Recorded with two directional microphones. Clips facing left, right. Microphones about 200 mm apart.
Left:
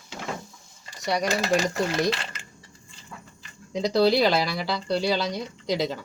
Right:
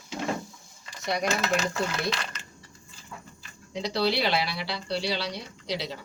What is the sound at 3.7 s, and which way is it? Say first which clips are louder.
Speech: left 6 dB; 45° left (ahead or behind).